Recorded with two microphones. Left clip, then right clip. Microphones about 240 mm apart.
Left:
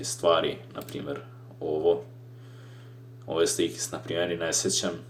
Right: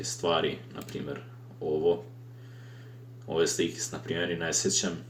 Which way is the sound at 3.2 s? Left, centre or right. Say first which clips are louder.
Left 2 dB; left.